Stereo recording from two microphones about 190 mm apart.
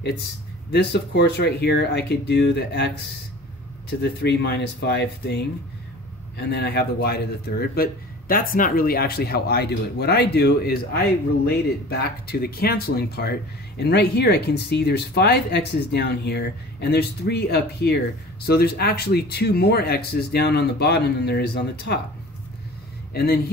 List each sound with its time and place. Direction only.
0.0 s speech: 60° left (ahead or behind)
4.0 s speech: 60° left (ahead or behind)
23.1 s speech: 55° left (ahead or behind)